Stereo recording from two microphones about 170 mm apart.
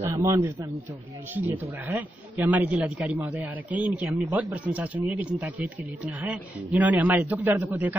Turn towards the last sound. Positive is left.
turn(degrees=-10)  # may be behind; listen again after turning